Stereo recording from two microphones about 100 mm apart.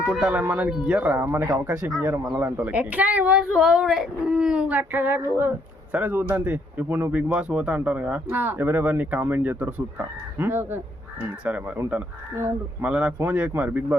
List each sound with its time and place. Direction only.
0.0 s speech: 10° right (ahead or behind)